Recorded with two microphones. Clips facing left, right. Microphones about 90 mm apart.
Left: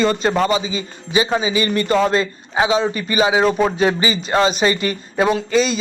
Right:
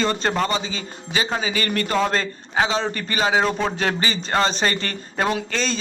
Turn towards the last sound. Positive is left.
turn(degrees=10)  # may be behind; listen again after turning